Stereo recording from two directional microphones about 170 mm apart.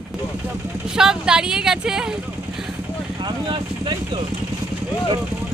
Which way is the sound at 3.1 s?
25° right (ahead or behind).